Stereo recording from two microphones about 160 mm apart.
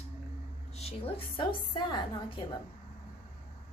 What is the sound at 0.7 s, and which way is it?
A woman's voice, 40° left (ahead or behind).